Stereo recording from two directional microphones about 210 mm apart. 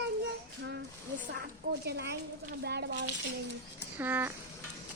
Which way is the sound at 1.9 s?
50° right (ahead or behind).